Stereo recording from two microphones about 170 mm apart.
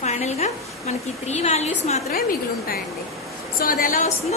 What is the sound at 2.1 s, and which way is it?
A woman's voice, 60° left (ahead or behind).